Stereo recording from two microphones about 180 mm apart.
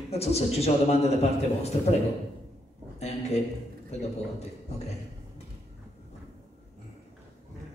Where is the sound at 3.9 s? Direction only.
40° left (ahead or behind).